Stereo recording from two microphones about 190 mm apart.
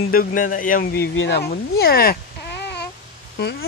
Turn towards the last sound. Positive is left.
turn(degrees=60)  # may be behind; listen again after turning